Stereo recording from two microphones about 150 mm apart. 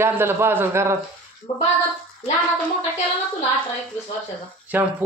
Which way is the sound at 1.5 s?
35° left (ahead or behind).